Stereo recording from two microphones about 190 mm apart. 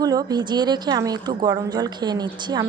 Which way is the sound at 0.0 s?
20° right (ahead or behind).